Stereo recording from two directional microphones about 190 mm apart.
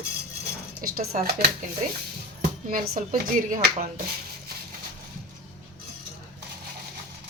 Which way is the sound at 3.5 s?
40° right (ahead or behind).